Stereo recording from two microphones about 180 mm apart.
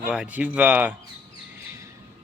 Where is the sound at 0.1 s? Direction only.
5° right (ahead or behind).